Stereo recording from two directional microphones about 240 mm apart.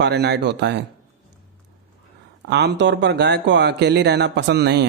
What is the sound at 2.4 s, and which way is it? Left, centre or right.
Speech, right.